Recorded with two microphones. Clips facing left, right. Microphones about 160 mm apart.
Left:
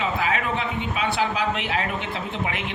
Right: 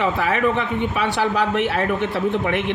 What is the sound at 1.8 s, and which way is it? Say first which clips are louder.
Speech: right 7 dB; 55° right (ahead or behind).